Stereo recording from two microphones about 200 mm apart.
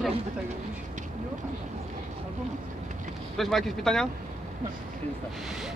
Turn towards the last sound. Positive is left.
turn(degrees=0)  # may be behind; listen again after turning